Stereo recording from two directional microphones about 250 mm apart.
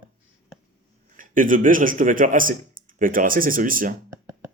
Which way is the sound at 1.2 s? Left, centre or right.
Right.